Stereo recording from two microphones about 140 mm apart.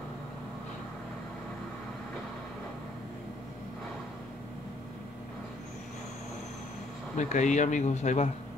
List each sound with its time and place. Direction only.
7.2 s speech: 60° left (ahead or behind)